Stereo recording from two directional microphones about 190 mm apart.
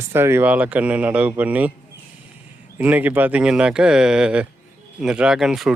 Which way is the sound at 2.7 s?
10° right (ahead or behind).